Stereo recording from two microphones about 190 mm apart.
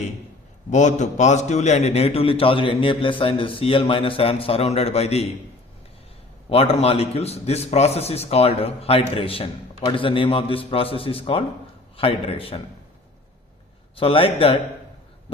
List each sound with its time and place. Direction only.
0.7 s a man's voice: 40° left (ahead or behind)
6.5 s a man's voice: 30° left (ahead or behind)
13.9 s a man's voice: 30° left (ahead or behind)